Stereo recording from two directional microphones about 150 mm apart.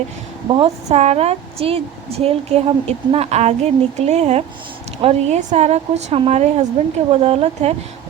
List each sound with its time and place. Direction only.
0.4 s a woman's voice: 30° right (ahead or behind)
0.9 s a woman's voice: 45° right (ahead or behind)